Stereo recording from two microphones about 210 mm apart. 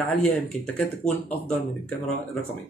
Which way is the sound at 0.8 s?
5° left (ahead or behind).